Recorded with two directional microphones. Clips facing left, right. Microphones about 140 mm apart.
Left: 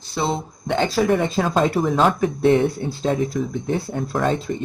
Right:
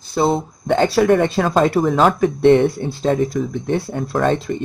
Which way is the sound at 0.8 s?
70° right (ahead or behind).